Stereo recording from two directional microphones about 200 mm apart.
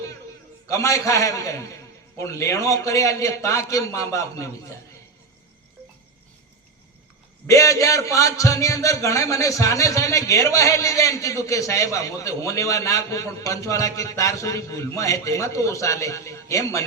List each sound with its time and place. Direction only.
0.7 s a man's voice: 15° left (ahead or behind)
7.4 s a man's voice: 15° left (ahead or behind)